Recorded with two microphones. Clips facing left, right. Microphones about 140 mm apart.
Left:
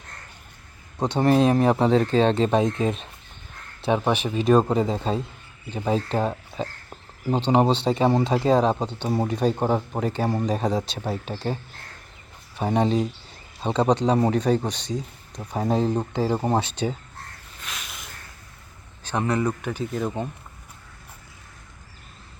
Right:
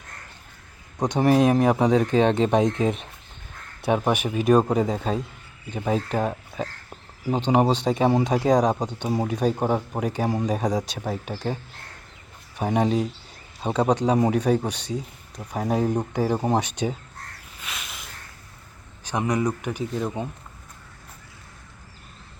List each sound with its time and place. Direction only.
0.9 s speech: 15° right (ahead or behind)
5.8 s speech: 5° right (ahead or behind)
10.0 s speech: 10° right (ahead or behind)
12.5 s speech: 5° right (ahead or behind)
17.6 s a sound: centre (ahead or behind)
19.0 s speech: 15° right (ahead or behind)
19.9 s speech: centre (ahead or behind)